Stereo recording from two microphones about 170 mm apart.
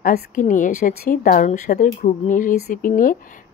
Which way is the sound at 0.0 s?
50° left (ahead or behind).